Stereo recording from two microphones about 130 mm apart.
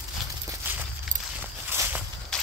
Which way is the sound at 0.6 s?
15° right (ahead or behind).